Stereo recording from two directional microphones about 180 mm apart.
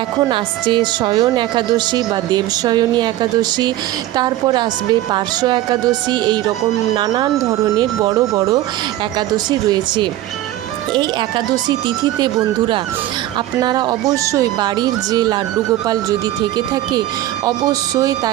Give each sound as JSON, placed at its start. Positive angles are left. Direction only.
{"t": 0.2, "sound": "a woman's voice", "side_deg": -25}